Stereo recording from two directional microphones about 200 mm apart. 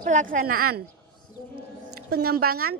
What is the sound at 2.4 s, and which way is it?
Speech, 90° right.